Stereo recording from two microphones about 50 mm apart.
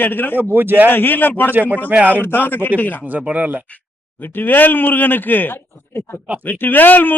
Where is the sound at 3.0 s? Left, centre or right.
Right.